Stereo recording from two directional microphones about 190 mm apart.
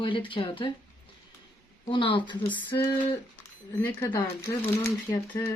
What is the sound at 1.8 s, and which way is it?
Speech, 25° left (ahead or behind).